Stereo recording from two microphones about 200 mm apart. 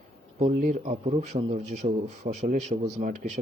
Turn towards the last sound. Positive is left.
turn(degrees=-40)  # may be behind; listen again after turning